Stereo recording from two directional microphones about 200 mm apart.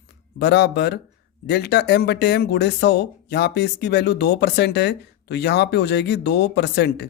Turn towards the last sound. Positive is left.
turn(degrees=60)  # may be behind; listen again after turning